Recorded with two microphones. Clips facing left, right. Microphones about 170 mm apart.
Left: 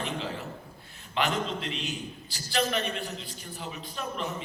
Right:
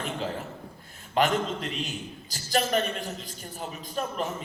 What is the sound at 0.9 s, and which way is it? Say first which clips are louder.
A man's voice: right 4 dB; 40° right (ahead or behind).